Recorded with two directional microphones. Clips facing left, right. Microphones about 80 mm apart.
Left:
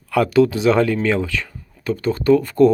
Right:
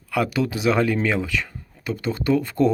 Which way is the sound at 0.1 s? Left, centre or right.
Centre.